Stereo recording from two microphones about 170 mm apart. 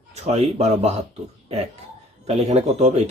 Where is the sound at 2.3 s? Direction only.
40° right (ahead or behind).